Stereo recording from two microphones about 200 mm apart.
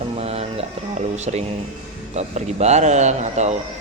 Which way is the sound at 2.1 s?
35° right (ahead or behind).